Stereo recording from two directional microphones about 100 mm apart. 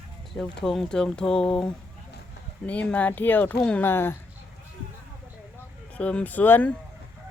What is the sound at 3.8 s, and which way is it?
Speech, 25° left (ahead or behind).